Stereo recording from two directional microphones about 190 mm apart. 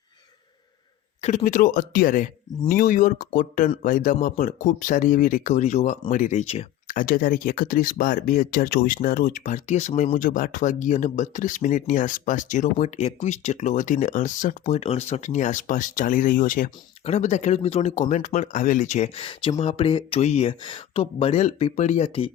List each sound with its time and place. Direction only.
1.2 s speech: 35° left (ahead or behind)